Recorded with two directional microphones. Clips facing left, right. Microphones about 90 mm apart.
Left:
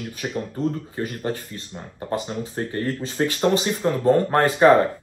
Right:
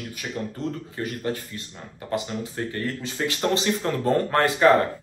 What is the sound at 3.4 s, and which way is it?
Speech, 20° left (ahead or behind).